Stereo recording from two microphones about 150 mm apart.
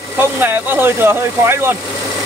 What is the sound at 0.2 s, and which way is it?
Speech, 15° right (ahead or behind).